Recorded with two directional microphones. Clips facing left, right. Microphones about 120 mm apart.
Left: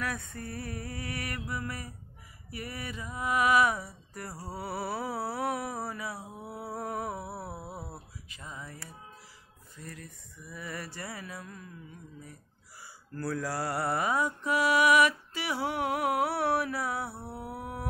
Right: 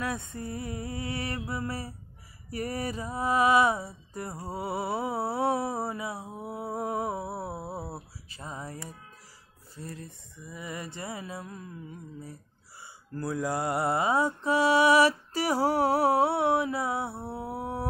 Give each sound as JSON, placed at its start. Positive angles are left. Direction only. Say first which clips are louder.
{"t": 0.0, "sound": "mantra", "louder": "right 3 dB", "side_deg": -25}
{"t": 2.5, "sound": "mantra", "louder": "right 7 dB", "side_deg": -40}
{"t": 7.3, "sound": "a sound", "louder": "right 5 dB", "side_deg": -25}
{"t": 8.3, "sound": "a sound", "louder": "right 5 dB", "side_deg": -35}
{"t": 9.8, "sound": "mantra", "louder": "right 4 dB", "side_deg": -30}
{"t": 13.1, "sound": "mantra", "louder": "right 3 dB", "side_deg": -20}